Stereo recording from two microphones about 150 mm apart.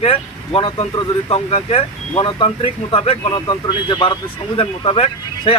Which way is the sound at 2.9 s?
40° left (ahead or behind).